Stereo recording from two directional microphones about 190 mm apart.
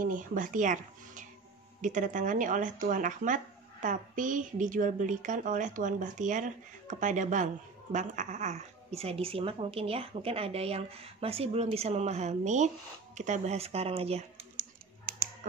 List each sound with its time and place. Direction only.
0.0 s a woman's voice: 45° right (ahead or behind)